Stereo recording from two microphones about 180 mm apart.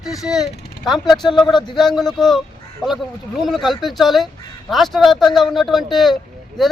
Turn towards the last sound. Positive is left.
turn(degrees=0)  # may be behind; listen again after turning